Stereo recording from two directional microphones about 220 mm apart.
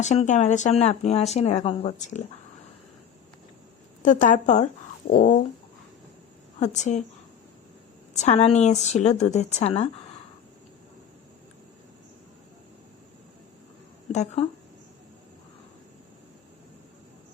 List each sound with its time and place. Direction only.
0.0 s speech: 30° left (ahead or behind)
4.0 s a woman's voice: 35° left (ahead or behind)
6.6 s a woman's voice: 30° left (ahead or behind)
8.1 s a woman's voice: 30° left (ahead or behind)
14.1 s a woman's voice: 30° left (ahead or behind)